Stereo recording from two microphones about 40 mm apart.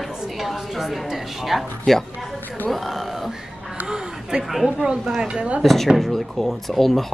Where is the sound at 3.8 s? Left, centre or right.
Centre.